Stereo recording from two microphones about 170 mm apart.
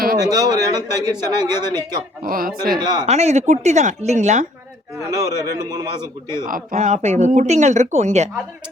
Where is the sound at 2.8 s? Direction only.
25° right (ahead or behind).